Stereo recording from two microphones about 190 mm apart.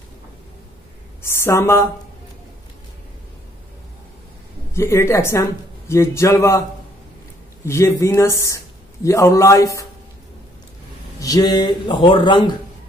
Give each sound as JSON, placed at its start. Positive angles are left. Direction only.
{"t": 1.2, "sound": "speech", "side_deg": 15}
{"t": 4.7, "sound": "speech", "side_deg": 15}
{"t": 7.6, "sound": "speech", "side_deg": 15}
{"t": 11.1, "sound": "speech", "side_deg": 20}